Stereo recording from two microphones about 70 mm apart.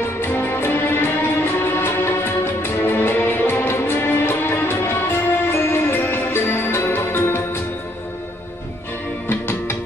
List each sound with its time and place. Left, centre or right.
0.2 s music: left
9.3 s music: left